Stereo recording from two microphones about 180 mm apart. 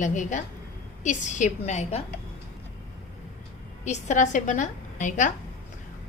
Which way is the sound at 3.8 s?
40° left (ahead or behind).